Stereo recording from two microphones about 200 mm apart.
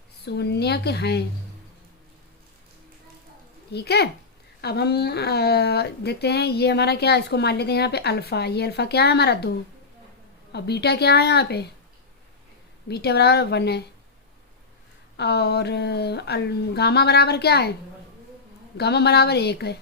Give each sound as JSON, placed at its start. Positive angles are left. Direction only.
{"t": 0.3, "sound": "speech", "side_deg": 55}
{"t": 3.7, "sound": "speech", "side_deg": 55}
{"t": 10.5, "sound": "speech", "side_deg": 55}
{"t": 12.9, "sound": "speech", "side_deg": 55}
{"t": 15.1, "sound": "speech", "side_deg": 55}
{"t": 18.8, "sound": "speech", "side_deg": 55}